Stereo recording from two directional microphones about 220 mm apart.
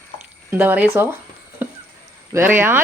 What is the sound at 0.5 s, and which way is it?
Speech, 10° right (ahead or behind).